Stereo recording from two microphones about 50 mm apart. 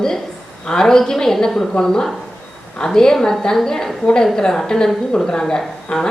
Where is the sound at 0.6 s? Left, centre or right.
Centre.